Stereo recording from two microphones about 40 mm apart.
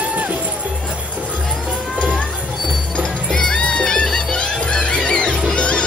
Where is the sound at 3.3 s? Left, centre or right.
Centre.